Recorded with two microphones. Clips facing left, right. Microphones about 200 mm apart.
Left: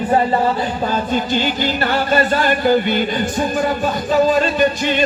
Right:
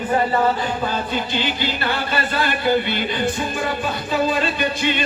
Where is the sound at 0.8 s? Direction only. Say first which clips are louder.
Left 5 dB; 45° left (ahead or behind).